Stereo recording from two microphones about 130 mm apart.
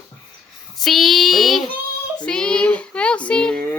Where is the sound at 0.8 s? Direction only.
Centre (ahead or behind).